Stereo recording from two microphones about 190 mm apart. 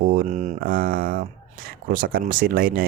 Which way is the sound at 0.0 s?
50° right (ahead or behind).